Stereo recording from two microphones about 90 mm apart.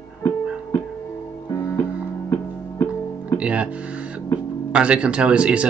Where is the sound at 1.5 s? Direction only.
40° left (ahead or behind).